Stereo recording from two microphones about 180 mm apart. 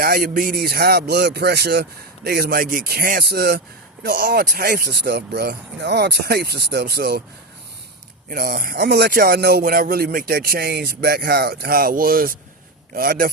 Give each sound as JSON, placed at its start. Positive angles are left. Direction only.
{"t": 0.0, "sound": "speech", "side_deg": -55}
{"t": 8.3, "sound": "a man's voice", "side_deg": -55}